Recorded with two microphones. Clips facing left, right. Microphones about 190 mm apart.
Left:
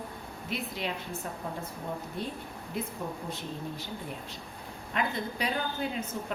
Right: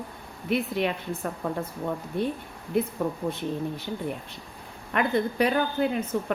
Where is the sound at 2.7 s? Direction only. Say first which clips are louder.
Right 10 dB; 60° right (ahead or behind).